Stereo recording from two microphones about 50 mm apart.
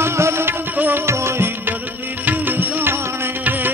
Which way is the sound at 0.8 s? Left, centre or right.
Right.